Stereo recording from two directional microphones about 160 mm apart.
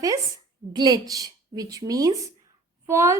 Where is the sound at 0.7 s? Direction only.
25° right (ahead or behind).